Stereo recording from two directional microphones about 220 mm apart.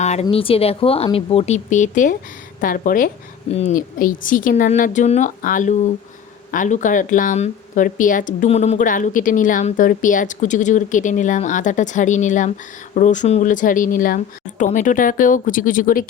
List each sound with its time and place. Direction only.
0.0 s speech: 30° left (ahead or behind)